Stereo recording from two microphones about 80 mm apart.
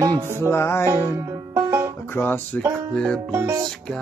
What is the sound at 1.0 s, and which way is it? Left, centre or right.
Music, right.